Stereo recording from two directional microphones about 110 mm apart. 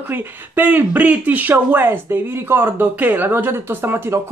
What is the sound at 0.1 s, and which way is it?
Speech, 15° right (ahead or behind).